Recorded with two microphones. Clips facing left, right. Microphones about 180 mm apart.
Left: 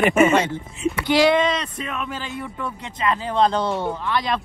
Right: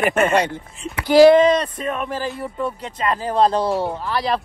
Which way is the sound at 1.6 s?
45° right (ahead or behind).